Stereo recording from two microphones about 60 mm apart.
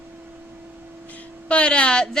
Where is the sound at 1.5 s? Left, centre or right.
Centre.